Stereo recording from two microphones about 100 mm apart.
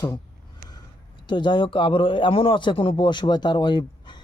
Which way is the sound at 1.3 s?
50° left (ahead or behind).